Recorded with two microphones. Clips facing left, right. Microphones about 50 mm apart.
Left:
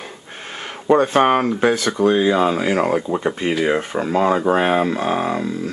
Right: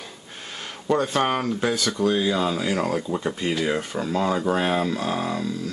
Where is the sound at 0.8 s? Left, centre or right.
Left.